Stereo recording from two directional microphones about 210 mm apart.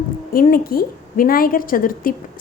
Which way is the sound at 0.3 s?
45° left (ahead or behind).